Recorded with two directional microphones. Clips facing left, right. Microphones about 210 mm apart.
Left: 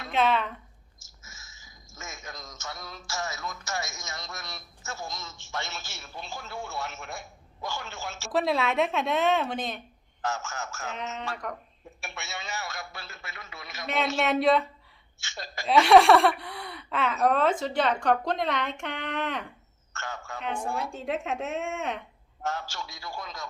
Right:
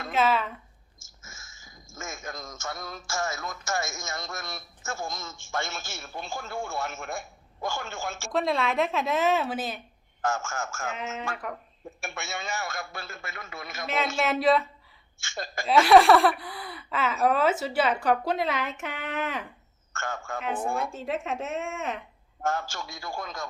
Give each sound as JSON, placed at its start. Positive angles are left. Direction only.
{"t": 0.1, "sound": "speech", "side_deg": -5}
{"t": 1.2, "sound": "speech", "side_deg": -50}
{"t": 8.3, "sound": "speech", "side_deg": 0}
{"t": 10.2, "sound": "a man's voice", "side_deg": -50}
{"t": 10.9, "sound": "speech", "side_deg": -5}
{"t": 11.9, "sound": "a man's voice", "side_deg": -50}
{"t": 13.8, "sound": "speech", "side_deg": 0}
{"t": 15.2, "sound": "a man's voice", "side_deg": -50}
{"t": 15.6, "sound": "speech", "side_deg": 0}
{"t": 19.9, "sound": "a man's voice", "side_deg": -50}
{"t": 20.4, "sound": "speech", "side_deg": -5}
{"t": 20.7, "sound": "a man's voice", "side_deg": -50}
{"t": 20.9, "sound": "speech", "side_deg": 0}
{"t": 22.4, "sound": "a man's voice", "side_deg": -50}